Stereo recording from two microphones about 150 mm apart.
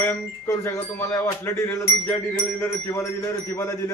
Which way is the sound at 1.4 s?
20° left (ahead or behind).